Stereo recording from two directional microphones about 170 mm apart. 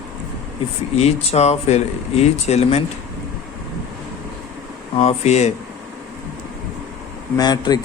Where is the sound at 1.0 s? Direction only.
40° left (ahead or behind).